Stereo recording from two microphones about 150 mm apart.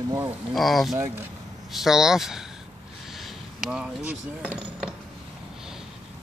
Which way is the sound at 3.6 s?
5° right (ahead or behind).